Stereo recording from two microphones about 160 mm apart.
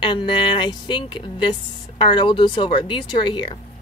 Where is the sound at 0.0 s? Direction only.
30° left (ahead or behind).